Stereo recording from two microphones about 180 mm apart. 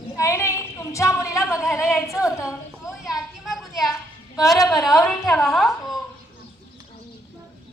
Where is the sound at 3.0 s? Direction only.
Centre (ahead or behind).